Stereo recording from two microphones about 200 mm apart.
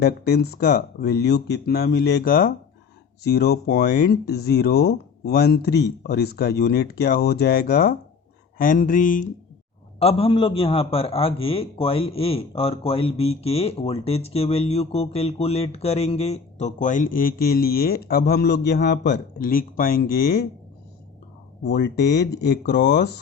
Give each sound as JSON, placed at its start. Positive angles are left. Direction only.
{"t": 0.0, "sound": "a man's voice", "side_deg": 55}
{"t": 10.0, "sound": "a man's voice", "side_deg": 30}
{"t": 21.6, "sound": "speech", "side_deg": 60}